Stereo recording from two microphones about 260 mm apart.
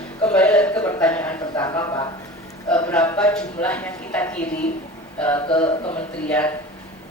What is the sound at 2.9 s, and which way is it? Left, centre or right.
Speech, centre.